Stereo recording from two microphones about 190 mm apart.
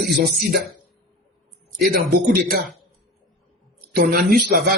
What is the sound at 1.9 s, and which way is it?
Speech, 50° right (ahead or behind).